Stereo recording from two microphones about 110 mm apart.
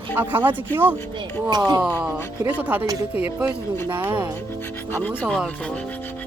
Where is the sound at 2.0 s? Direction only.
15° right (ahead or behind).